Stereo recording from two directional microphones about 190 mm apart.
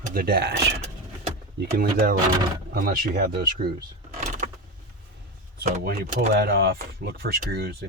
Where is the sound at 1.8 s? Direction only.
50° right (ahead or behind).